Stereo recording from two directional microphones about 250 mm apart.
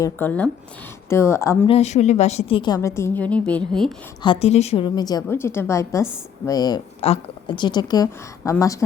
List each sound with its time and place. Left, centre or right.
0.0 s a woman's voice: centre
1.7 s a woman's voice: left; by 3.9 s centre
4.2 s a woman's voice: left